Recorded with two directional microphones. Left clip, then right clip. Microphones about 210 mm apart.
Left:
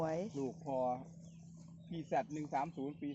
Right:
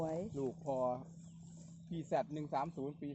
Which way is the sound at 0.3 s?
25° right (ahead or behind).